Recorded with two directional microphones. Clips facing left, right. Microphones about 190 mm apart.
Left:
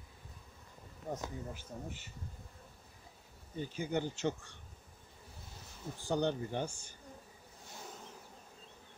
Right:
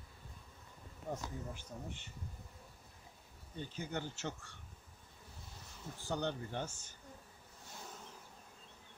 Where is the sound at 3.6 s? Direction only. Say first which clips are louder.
Left 6 dB; 10° left (ahead or behind).